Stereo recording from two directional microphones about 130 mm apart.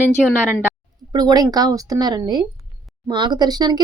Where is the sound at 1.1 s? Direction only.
30° right (ahead or behind).